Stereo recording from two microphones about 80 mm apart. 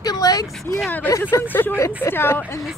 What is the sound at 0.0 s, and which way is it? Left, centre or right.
Vehicle, left.